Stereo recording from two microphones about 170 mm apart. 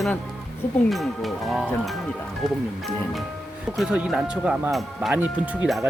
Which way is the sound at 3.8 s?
5° right (ahead or behind).